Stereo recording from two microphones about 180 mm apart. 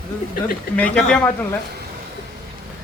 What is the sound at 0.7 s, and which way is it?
Speech, 5° left (ahead or behind).